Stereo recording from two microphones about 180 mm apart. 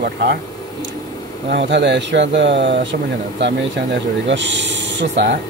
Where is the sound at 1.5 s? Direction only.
70° right (ahead or behind).